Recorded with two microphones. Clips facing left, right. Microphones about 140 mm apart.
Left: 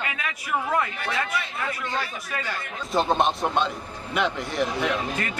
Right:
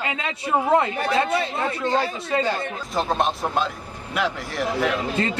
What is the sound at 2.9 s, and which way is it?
A man's voice, centre (ahead or behind).